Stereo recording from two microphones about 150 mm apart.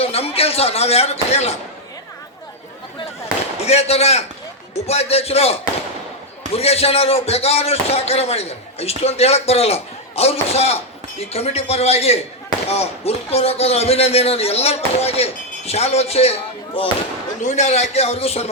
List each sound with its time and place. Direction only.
0.0 s speech: 40° left (ahead or behind)
3.6 s speech: 45° left (ahead or behind)
17.4 s speech: 50° left (ahead or behind)